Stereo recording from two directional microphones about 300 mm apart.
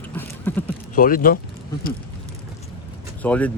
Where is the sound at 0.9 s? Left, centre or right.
Left.